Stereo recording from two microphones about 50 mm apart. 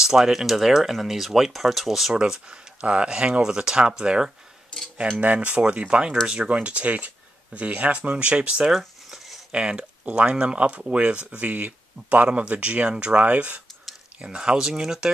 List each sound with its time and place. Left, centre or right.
0.0 s speech: centre
2.1 s speech: centre
5.2 s speech: right
8.7 s a sound: centre
9.5 s speech: right
14.2 s speech: centre